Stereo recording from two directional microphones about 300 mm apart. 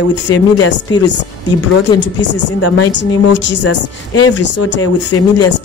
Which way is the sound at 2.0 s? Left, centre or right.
Left.